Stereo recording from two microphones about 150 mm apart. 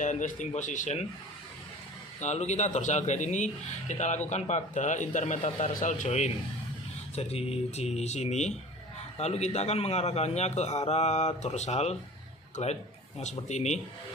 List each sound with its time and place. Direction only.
0.0 s speech: 55° left (ahead or behind)
2.2 s a man's voice: 50° left (ahead or behind)